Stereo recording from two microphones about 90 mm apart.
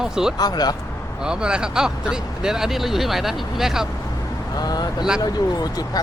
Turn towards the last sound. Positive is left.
turn(degrees=45)  # may be behind; listen again after turning